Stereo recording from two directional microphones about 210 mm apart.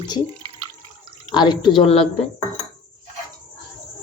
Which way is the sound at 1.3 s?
20° left (ahead or behind).